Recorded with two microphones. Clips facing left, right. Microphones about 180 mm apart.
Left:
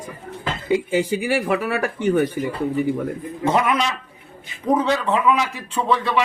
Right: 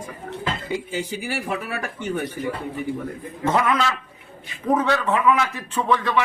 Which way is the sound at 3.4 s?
15° left (ahead or behind).